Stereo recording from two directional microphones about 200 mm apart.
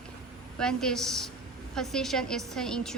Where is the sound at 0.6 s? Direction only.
5° left (ahead or behind).